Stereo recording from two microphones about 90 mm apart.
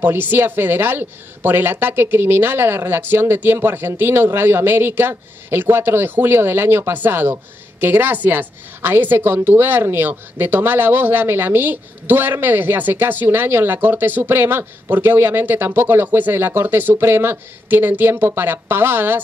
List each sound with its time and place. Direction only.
0.0 s a woman's voice: 20° right (ahead or behind)